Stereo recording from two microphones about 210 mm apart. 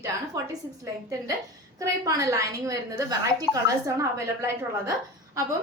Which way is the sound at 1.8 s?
15° right (ahead or behind).